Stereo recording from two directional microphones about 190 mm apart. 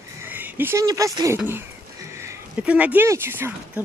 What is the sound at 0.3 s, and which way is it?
Speech, 10° right (ahead or behind).